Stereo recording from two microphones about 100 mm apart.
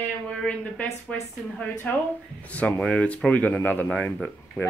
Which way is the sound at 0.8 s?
15° left (ahead or behind).